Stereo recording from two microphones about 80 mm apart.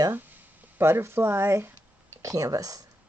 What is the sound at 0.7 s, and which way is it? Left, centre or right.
Speech, right.